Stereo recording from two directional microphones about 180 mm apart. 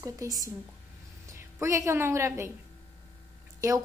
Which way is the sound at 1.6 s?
15° right (ahead or behind).